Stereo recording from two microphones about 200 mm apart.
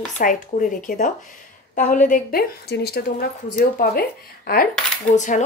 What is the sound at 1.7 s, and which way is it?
A woman's voice, 40° left (ahead or behind).